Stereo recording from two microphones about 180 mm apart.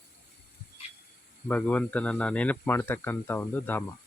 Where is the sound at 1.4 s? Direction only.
10° left (ahead or behind).